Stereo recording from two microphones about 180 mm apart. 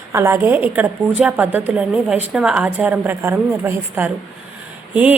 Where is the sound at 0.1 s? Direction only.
15° right (ahead or behind).